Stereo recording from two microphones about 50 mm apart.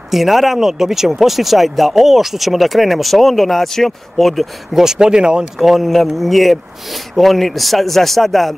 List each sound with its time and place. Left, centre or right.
0.1 s speech: centre
4.8 s speech: centre
5.6 s speech: centre